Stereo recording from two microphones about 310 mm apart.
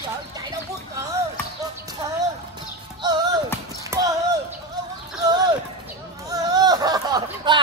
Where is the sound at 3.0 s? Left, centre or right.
Centre.